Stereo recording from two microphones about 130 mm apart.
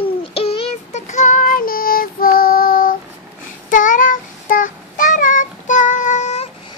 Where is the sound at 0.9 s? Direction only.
65° left (ahead or behind); by 2.2 s 90° left.